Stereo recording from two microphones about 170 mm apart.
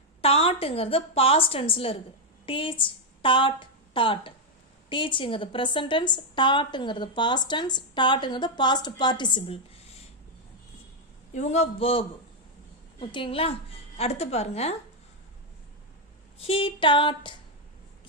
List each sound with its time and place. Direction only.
0.2 s a woman's voice: 35° left (ahead or behind)
11.3 s a woman's voice: 40° left (ahead or behind)
16.4 s a woman's voice: 35° left (ahead or behind)